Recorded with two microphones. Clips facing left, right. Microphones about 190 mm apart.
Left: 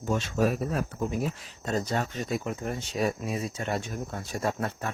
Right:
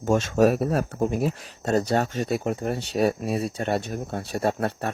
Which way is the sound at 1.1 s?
70° right (ahead or behind).